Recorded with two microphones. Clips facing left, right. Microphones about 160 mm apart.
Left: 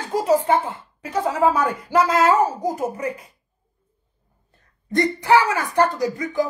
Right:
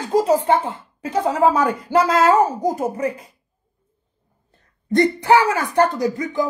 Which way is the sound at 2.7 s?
30° right (ahead or behind).